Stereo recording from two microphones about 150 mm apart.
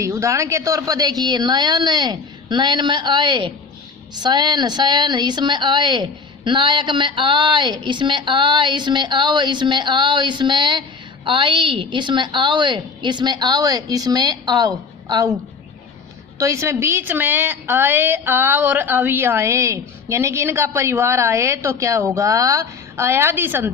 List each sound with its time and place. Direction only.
0.0 s a woman's voice: 20° right (ahead or behind)
16.4 s a woman's voice: 20° right (ahead or behind)